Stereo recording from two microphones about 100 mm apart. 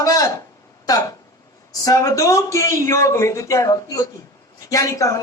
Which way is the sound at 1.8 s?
35° left (ahead or behind).